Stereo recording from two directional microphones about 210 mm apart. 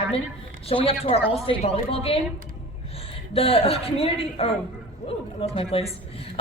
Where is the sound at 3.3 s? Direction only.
25° left (ahead or behind).